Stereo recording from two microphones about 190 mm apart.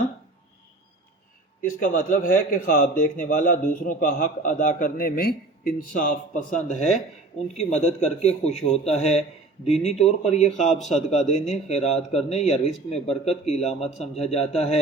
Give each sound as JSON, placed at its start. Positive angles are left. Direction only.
{"t": 1.6, "sound": "a man's voice", "side_deg": 45}